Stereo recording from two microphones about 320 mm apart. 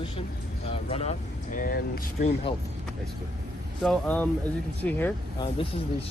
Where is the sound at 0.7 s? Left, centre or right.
Centre.